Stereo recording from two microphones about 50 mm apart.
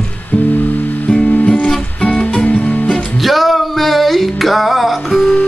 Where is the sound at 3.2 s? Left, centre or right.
Centre.